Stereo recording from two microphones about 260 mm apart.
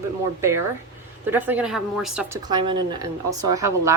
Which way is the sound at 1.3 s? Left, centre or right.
Centre.